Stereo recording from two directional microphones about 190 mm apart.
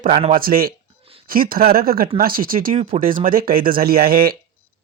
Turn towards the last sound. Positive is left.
turn(degrees=-50)  # may be behind; listen again after turning